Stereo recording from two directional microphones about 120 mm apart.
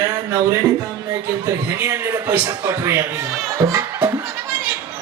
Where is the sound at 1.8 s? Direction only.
20° right (ahead or behind).